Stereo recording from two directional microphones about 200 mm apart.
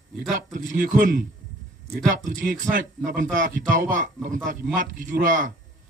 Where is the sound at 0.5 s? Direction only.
45° right (ahead or behind).